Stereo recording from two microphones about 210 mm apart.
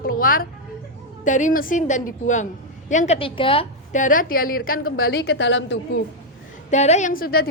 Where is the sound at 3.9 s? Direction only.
40° left (ahead or behind).